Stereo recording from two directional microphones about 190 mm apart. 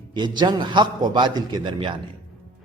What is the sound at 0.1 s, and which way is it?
A man's voice, 25° right (ahead or behind).